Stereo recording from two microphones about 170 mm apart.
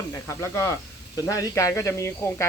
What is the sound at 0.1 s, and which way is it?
Speech, 15° left (ahead or behind).